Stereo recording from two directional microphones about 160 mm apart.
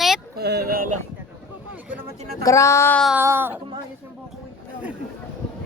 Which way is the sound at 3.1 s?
15° right (ahead or behind).